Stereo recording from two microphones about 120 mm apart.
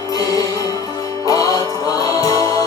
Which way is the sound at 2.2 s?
30° left (ahead or behind).